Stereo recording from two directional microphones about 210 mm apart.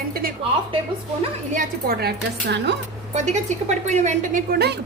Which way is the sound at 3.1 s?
35° right (ahead or behind).